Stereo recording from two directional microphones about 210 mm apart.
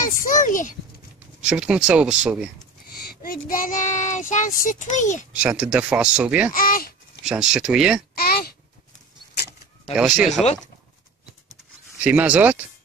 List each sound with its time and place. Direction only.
0.0 s a sound: 40° left (ahead or behind)
1.4 s speech: 5° right (ahead or behind)
3.0 s child singing: 45° left (ahead or behind)
5.3 s speech: 5° right (ahead or behind)
6.5 s a child's voice: 40° left (ahead or behind)
7.2 s speech: 5° right (ahead or behind)
8.1 s a sound: 45° left (ahead or behind)
9.9 s speech: 5° right (ahead or behind)
12.0 s speech: 5° right (ahead or behind)